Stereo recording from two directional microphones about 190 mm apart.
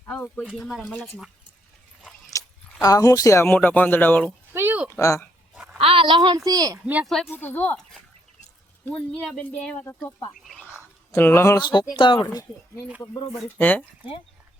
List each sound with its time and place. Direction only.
0.0 s speech: 10° left (ahead or behind)
0.4 s speech: centre (ahead or behind)
2.3 s a sound: 15° left (ahead or behind)
2.8 s speech: 15° left (ahead or behind)
4.5 s a sound: 10° right (ahead or behind)
4.9 s speech: 15° left (ahead or behind)
5.8 s a woman's voice: 30° right (ahead or behind)
6.8 s speech: 5° right (ahead or behind)
10.6 s bird: 5° right (ahead or behind)
11.1 s speech: 10° left (ahead or behind)